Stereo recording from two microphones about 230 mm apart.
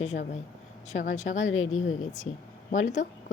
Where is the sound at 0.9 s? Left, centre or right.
Left.